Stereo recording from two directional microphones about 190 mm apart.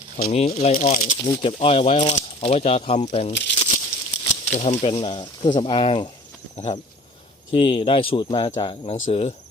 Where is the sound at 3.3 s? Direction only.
65° left (ahead or behind).